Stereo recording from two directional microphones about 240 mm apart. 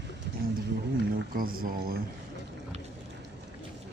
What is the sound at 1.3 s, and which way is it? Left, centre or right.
Speech, right.